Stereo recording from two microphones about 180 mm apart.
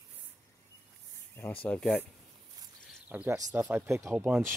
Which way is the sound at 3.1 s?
10° right (ahead or behind).